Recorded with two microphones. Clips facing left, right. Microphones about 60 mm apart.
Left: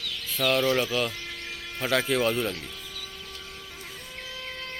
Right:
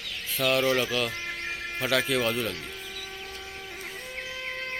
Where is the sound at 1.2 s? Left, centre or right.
Right.